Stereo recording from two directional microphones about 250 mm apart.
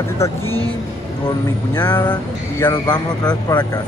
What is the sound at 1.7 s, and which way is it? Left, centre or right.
A man's voice, centre.